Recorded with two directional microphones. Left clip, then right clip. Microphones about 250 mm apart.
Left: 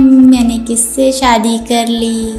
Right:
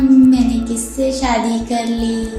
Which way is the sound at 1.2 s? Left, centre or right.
Left.